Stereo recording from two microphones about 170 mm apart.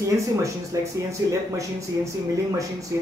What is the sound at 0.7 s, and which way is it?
Speech, 20° right (ahead or behind).